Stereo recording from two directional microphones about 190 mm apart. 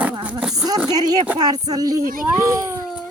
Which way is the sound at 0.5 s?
20° right (ahead or behind).